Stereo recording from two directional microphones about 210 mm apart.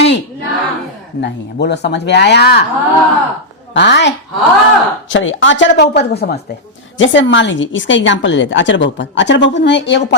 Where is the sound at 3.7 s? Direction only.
55° left (ahead or behind).